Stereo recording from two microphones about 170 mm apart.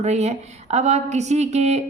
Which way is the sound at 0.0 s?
40° right (ahead or behind).